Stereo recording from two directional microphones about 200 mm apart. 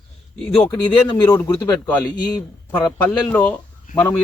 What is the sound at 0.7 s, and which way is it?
Speech, 20° left (ahead or behind).